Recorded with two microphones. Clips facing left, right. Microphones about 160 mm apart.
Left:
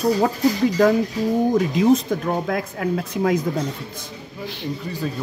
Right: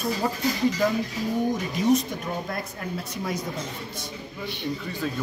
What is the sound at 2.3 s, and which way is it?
Speech, 85° left.